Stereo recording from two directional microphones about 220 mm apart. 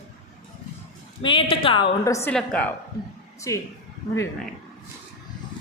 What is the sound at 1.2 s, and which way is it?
A woman's voice, 25° left (ahead or behind).